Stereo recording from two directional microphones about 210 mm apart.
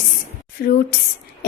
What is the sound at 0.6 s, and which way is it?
Speech, 45° left (ahead or behind).